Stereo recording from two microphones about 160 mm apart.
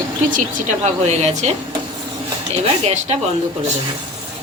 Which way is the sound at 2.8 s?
45° right (ahead or behind).